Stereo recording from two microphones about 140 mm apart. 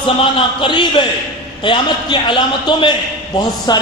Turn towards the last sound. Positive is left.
turn(degrees=30)  # may be behind; listen again after turning